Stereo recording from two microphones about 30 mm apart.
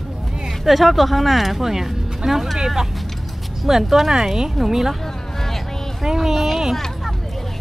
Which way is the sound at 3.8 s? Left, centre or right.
Centre.